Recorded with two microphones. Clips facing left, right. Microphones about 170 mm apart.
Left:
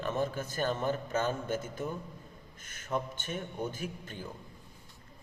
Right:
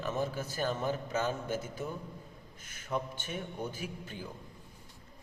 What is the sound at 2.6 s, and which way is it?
Speech, 50° left (ahead or behind).